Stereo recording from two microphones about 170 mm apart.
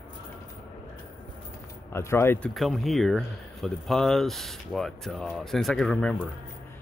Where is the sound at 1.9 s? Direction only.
15° left (ahead or behind).